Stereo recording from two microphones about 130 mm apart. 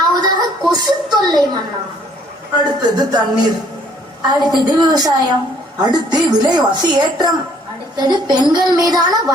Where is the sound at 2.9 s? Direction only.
30° right (ahead or behind).